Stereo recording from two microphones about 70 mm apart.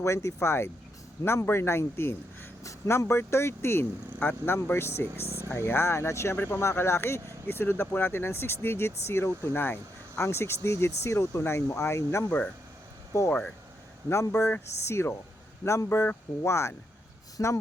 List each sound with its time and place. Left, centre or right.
0.0 s speech: left
12.2 s speech: left
14.1 s speech: left